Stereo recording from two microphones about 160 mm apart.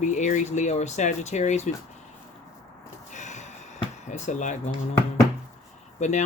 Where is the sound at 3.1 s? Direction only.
50° left (ahead or behind).